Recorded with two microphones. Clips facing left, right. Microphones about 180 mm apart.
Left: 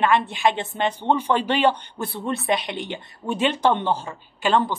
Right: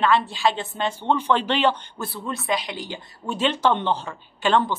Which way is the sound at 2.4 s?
25° left (ahead or behind).